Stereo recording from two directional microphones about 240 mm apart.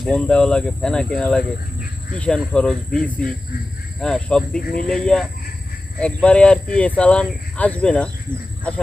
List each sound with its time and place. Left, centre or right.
0.0 s speech: centre